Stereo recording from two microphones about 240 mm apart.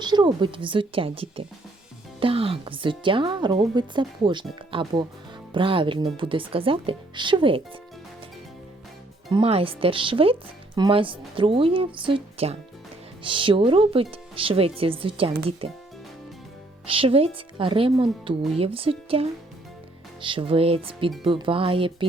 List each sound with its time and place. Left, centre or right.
0.0 s speech: centre
9.3 s speech: right
16.8 s speech: right